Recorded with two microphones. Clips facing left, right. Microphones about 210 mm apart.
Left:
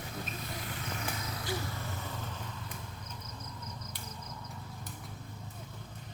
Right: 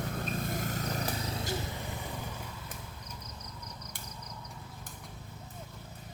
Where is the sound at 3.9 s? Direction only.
50° right (ahead or behind).